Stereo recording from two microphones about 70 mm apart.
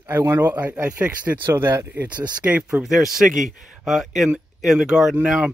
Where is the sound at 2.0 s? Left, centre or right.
Right.